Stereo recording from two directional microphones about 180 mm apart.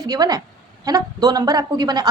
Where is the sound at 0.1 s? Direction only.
20° right (ahead or behind).